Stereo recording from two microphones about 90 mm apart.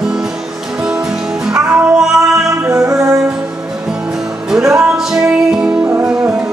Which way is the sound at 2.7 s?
35° right (ahead or behind).